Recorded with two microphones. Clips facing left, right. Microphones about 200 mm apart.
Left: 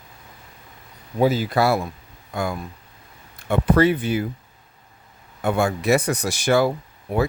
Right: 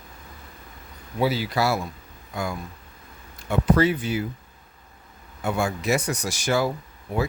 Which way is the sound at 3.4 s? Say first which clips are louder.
Left 3 dB; 60° left (ahead or behind).